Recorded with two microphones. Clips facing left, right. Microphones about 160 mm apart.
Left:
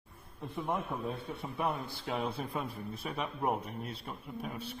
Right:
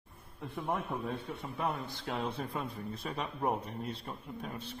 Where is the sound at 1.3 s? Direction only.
10° left (ahead or behind).